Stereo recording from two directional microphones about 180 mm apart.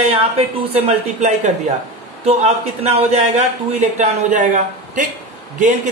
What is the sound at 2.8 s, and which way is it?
A man's voice, 35° right (ahead or behind).